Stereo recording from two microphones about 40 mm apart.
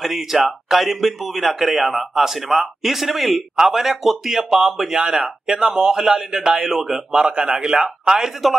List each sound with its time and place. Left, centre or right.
0.0 s a man's voice: centre
8.4 s a man's voice: centre